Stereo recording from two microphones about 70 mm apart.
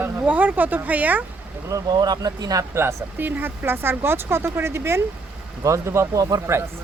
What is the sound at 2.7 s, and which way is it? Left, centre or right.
Speech, right.